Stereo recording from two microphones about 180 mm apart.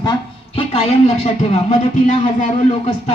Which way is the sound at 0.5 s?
35° left (ahead or behind).